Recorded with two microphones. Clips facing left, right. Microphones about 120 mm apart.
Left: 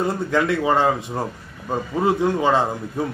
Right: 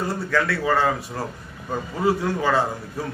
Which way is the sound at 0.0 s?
20° left (ahead or behind).